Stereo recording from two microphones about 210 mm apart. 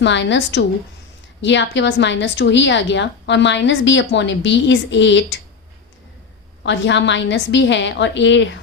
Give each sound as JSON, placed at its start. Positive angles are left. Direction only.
{"t": 0.0, "sound": "a woman's voice", "side_deg": 60}
{"t": 6.6, "sound": "a woman's voice", "side_deg": 60}